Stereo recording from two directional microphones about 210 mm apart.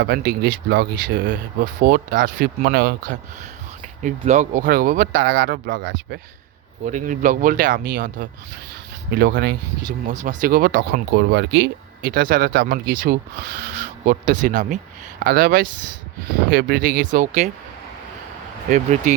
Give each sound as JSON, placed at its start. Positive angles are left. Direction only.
{"t": 0.0, "sound": "speech", "side_deg": -50}
{"t": 1.3, "sound": "speech", "side_deg": -40}
{"t": 4.0, "sound": "speech", "side_deg": -35}
{"t": 5.7, "sound": "speech", "side_deg": -65}
{"t": 6.8, "sound": "speech", "side_deg": -40}
{"t": 10.1, "sound": "speech", "side_deg": -35}
{"t": 18.7, "sound": "speech", "side_deg": -35}